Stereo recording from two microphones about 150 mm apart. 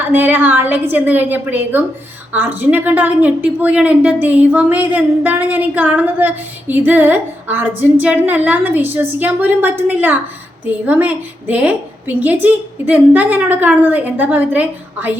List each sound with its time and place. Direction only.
0.0 s a woman's voice: 10° right (ahead or behind)